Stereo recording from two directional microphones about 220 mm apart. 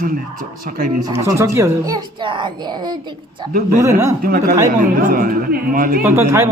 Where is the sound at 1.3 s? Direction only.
10° right (ahead or behind).